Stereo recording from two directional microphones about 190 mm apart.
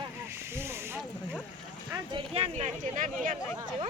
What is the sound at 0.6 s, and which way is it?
Speech, 15° right (ahead or behind).